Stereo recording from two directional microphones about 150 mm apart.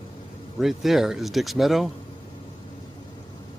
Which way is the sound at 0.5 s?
Centre (ahead or behind).